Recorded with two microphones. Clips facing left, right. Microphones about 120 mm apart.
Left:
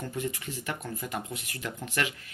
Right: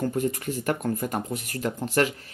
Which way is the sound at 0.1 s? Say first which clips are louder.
Right 7 dB; 45° right (ahead or behind).